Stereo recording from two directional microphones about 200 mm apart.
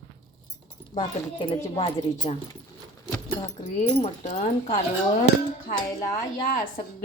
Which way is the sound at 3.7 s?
35° left (ahead or behind).